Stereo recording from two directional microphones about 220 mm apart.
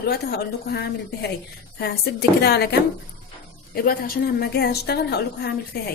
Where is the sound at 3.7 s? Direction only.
45° left (ahead or behind).